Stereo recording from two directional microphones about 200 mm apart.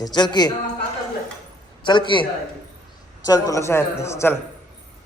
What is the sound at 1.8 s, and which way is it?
Speech, 25° left (ahead or behind).